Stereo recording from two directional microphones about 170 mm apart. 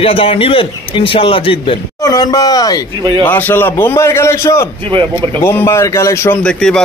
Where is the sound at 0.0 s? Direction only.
35° left (ahead or behind).